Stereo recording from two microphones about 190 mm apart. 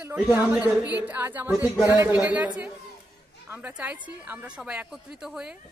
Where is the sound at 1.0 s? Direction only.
10° right (ahead or behind).